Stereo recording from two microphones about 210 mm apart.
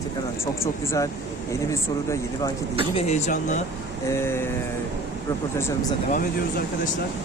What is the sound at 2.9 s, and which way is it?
Speech, 30° left (ahead or behind).